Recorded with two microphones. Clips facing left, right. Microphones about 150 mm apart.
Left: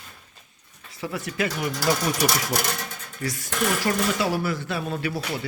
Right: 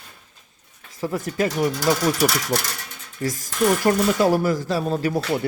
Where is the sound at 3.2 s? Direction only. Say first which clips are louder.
Right 6 dB; 45° right (ahead or behind).